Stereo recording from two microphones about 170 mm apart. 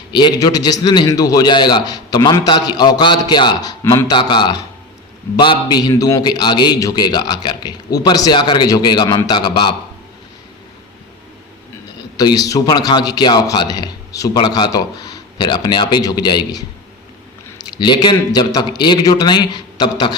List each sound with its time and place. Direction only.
0.1 s a man's voice: 25° left (ahead or behind)
12.1 s a man's voice: 25° left (ahead or behind)
17.7 s a man's voice: 25° left (ahead or behind)